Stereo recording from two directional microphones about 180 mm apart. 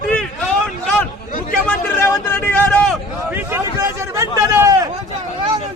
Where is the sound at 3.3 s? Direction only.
15° right (ahead or behind).